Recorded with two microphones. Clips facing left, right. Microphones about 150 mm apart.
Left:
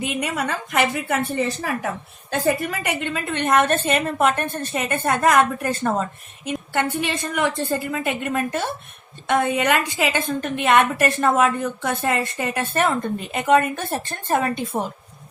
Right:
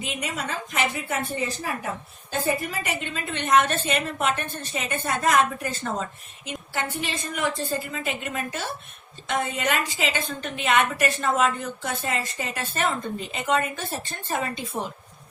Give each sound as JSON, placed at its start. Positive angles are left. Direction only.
{"t": 0.0, "sound": "a woman's voice", "side_deg": 60}
{"t": 2.6, "sound": "a woman's voice", "side_deg": 60}